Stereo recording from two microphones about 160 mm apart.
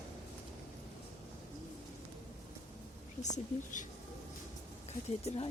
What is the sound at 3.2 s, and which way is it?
Speech, 50° left (ahead or behind).